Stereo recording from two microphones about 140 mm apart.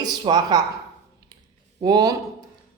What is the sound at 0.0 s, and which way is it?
Speech, 30° right (ahead or behind).